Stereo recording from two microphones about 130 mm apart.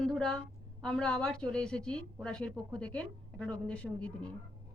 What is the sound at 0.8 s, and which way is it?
Speech, 5° left (ahead or behind).